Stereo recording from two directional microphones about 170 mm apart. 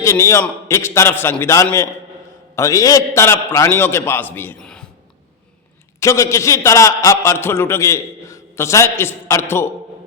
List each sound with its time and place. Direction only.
0.0 s a man's voice: 15° left (ahead or behind)
6.0 s a man's voice: 15° left (ahead or behind)